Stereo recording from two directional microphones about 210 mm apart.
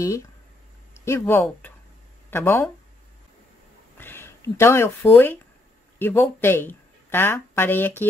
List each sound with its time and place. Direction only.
0.9 s speech: 10° left (ahead or behind)
4.0 s speech: 10° left (ahead or behind)